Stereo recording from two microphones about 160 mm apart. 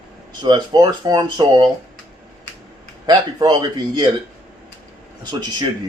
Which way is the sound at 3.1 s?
25° right (ahead or behind).